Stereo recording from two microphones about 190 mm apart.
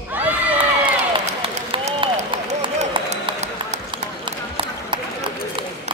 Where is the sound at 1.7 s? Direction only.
25° right (ahead or behind).